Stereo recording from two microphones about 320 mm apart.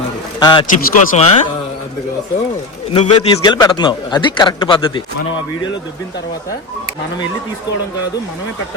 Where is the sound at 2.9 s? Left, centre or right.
Centre.